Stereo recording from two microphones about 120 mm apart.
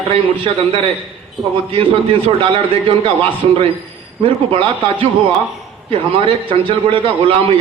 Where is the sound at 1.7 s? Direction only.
50° right (ahead or behind).